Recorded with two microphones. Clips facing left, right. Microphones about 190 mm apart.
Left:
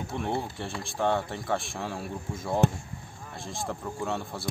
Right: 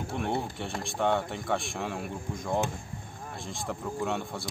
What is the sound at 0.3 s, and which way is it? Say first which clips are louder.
Speech: even; centre (ahead or behind).